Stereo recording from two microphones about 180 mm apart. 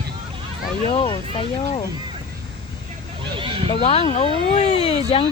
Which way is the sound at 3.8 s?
35° left (ahead or behind).